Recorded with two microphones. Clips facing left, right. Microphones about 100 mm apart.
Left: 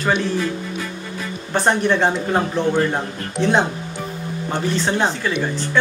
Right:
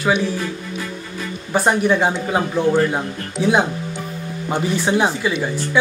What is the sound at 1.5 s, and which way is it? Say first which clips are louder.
A man's voice: right 1 dB; 5° right (ahead or behind).